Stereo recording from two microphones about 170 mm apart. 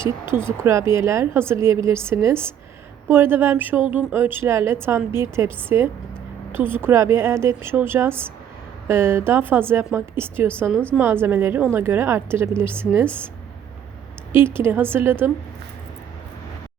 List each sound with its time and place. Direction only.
0.0 s speech: 15° right (ahead or behind)
14.3 s speech: 15° right (ahead or behind)